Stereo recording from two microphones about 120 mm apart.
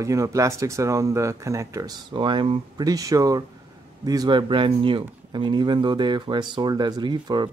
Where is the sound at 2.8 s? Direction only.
30° right (ahead or behind).